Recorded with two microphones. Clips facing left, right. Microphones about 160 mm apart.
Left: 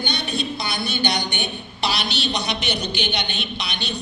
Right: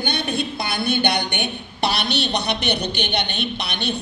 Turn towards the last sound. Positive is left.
turn(degrees=-55)  # may be behind; listen again after turning